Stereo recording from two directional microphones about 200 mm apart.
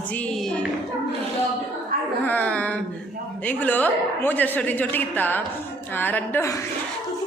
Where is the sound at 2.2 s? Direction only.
10° left (ahead or behind).